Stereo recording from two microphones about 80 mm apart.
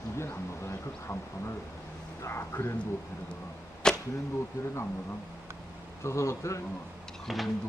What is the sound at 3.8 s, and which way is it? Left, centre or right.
Arrow, centre.